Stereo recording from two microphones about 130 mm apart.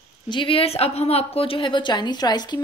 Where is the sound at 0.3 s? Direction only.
40° left (ahead or behind).